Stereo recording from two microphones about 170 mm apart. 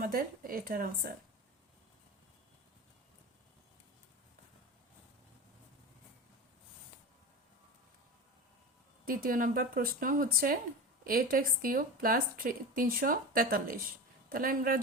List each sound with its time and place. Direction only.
0.0 s speech: 60° right (ahead or behind)
9.0 s speech: 55° right (ahead or behind)